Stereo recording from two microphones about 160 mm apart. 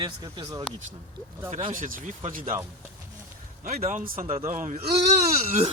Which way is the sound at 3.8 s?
50° right (ahead or behind).